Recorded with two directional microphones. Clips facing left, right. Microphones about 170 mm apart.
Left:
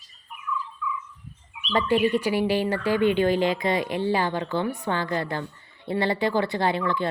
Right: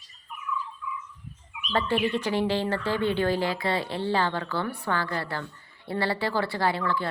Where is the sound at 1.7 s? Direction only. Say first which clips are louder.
Left 4 dB; 15° left (ahead or behind).